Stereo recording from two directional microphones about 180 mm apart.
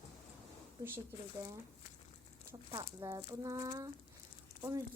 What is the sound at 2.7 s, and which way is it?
Speech, 20° right (ahead or behind).